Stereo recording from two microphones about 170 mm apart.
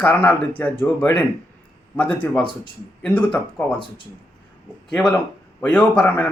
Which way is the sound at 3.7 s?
30° left (ahead or behind).